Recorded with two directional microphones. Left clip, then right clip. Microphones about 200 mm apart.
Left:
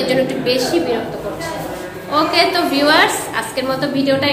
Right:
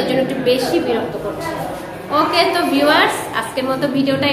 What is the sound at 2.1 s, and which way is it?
A woman's voice, 5° left (ahead or behind).